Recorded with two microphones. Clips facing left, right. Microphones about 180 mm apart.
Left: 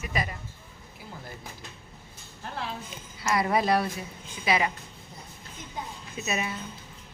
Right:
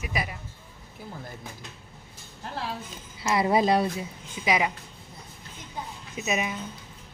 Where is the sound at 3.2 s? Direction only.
25° right (ahead or behind).